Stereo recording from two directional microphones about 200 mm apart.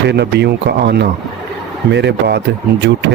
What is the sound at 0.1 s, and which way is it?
Speech, 55° right (ahead or behind).